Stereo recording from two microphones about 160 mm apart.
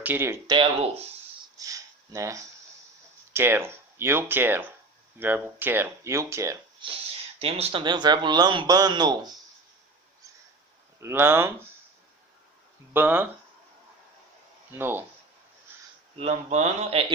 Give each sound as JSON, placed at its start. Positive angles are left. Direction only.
{"t": 0.0, "sound": "speech", "side_deg": -15}
{"t": 0.5, "sound": "speech", "side_deg": -35}
{"t": 1.5, "sound": "speech", "side_deg": -20}
{"t": 6.8, "sound": "speech", "side_deg": -35}
{"t": 11.0, "sound": "speech", "side_deg": -15}
{"t": 12.9, "sound": "speech", "side_deg": -10}
{"t": 14.7, "sound": "speech", "side_deg": -15}
{"t": 16.1, "sound": "speech", "side_deg": -45}